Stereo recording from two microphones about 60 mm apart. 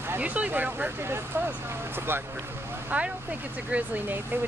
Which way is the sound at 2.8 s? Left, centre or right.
Right.